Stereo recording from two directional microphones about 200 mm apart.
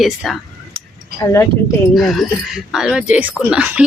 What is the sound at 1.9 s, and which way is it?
Speech, centre (ahead or behind).